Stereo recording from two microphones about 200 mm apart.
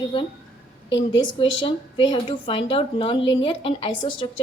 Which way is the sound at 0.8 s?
65° left (ahead or behind).